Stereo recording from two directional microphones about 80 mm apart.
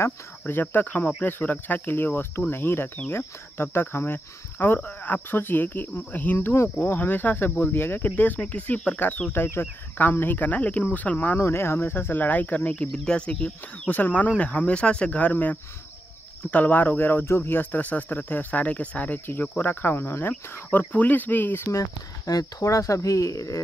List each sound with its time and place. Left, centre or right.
0.5 s speech: left
11.3 s speech: left
22.2 s speech: left